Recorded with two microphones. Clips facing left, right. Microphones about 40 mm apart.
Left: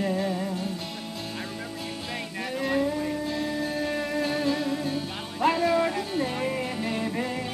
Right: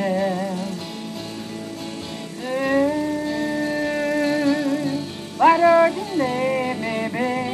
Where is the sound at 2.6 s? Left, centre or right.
Right.